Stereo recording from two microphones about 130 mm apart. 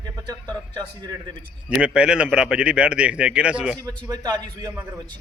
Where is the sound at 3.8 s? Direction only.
30° right (ahead or behind).